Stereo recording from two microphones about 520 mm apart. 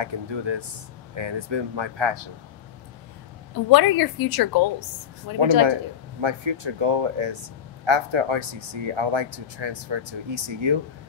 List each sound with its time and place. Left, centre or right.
0.0 s speech: right
3.7 s a woman's voice: left
6.2 s speech: right